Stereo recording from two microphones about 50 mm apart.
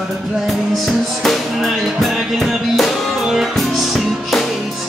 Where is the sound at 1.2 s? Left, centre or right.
Centre.